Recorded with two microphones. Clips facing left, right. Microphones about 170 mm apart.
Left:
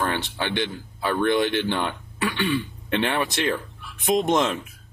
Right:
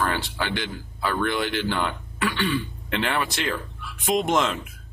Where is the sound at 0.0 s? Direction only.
20° left (ahead or behind).